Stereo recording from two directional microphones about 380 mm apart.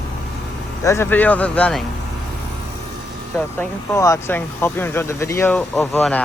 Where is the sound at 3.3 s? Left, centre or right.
Centre.